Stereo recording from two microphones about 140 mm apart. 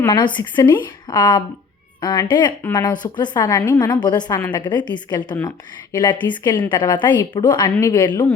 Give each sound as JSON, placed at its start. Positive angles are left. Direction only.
{"t": 0.1, "sound": "a woman's voice", "side_deg": 35}